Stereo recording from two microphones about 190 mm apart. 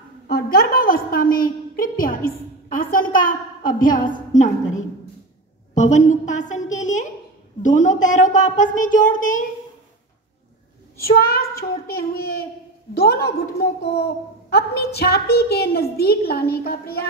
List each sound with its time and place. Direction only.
0.3 s a woman's voice: 55° left (ahead or behind)
11.0 s a woman's voice: 50° left (ahead or behind)